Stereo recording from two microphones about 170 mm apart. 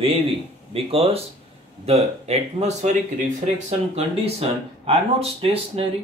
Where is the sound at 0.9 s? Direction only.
35° right (ahead or behind).